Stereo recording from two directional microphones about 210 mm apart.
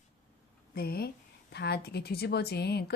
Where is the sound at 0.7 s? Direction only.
45° left (ahead or behind).